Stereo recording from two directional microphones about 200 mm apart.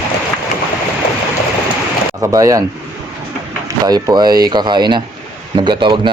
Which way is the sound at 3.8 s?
20° right (ahead or behind).